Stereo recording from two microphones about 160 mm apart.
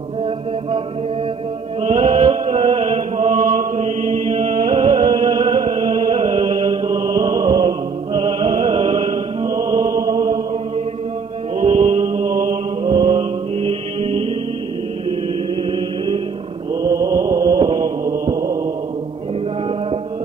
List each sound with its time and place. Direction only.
1.8 s chant: 35° right (ahead or behind)
3.5 s music: 45° right (ahead or behind); by 10.4 s 25° right (ahead or behind)
11.6 s mantra: 40° right (ahead or behind)
12.8 s mantra: 25° right (ahead or behind)
16.8 s mantra: 20° right (ahead or behind)